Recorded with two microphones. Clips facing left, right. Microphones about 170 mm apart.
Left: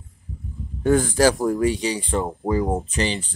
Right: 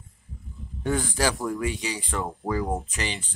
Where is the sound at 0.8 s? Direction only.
45° left (ahead or behind); by 2.2 s 30° left (ahead or behind).